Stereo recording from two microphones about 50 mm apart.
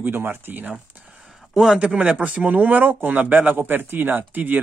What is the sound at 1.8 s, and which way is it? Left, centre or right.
Speech, right.